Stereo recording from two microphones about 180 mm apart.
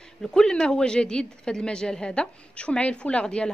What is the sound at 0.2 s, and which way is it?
Speech, 5° left (ahead or behind).